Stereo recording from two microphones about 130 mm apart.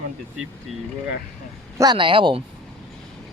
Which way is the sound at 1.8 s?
35° right (ahead or behind).